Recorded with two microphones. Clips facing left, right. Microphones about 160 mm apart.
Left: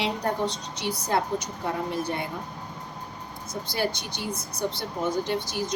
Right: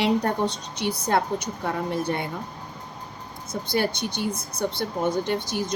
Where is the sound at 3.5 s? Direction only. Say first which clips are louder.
Right 3 dB; 55° right (ahead or behind).